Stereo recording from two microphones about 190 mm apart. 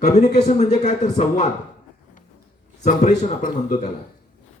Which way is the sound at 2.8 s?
35° left (ahead or behind).